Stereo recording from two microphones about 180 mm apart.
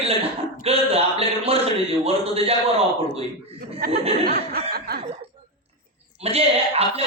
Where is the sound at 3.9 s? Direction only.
35° right (ahead or behind).